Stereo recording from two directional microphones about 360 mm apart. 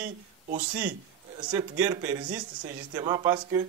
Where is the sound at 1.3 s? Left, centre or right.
Centre.